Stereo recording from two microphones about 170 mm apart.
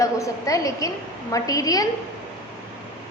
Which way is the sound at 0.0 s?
20° left (ahead or behind).